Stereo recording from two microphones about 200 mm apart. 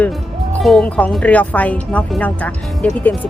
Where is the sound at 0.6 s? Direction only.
5° left (ahead or behind).